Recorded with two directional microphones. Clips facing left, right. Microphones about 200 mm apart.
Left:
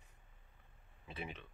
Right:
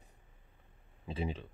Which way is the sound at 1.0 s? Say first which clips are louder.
Right 9 dB; 30° right (ahead or behind).